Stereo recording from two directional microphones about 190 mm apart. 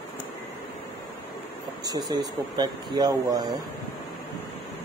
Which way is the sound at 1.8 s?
20° right (ahead or behind).